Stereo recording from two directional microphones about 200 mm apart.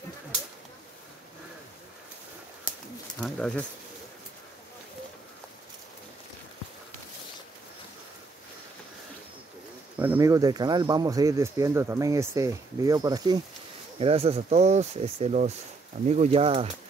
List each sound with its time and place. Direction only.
3.2 s speech: 5° left (ahead or behind)
9.9 s speech: 10° right (ahead or behind)
13.9 s speech: 30° right (ahead or behind)